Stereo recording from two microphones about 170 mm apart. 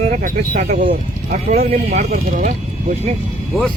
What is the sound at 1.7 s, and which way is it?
Speech, 40° right (ahead or behind).